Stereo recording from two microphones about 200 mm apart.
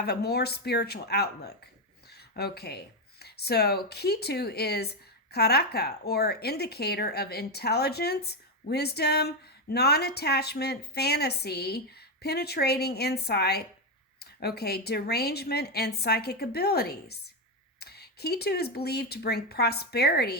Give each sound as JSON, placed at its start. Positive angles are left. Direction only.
{"t": 0.0, "sound": "a woman's voice", "side_deg": 55}